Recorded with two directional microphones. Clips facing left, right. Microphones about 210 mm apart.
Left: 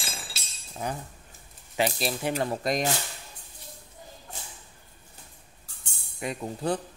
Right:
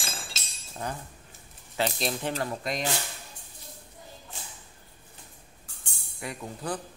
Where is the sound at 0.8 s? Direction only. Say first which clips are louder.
Left 2 dB; 10° left (ahead or behind).